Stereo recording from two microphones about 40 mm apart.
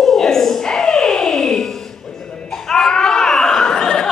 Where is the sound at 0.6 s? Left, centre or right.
Centre.